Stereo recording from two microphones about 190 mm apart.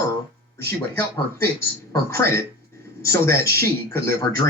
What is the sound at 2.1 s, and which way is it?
Speech, 15° left (ahead or behind).